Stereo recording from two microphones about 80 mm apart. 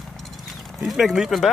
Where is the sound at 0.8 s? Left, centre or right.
Centre.